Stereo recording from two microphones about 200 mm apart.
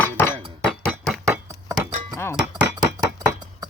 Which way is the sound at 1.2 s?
15° right (ahead or behind).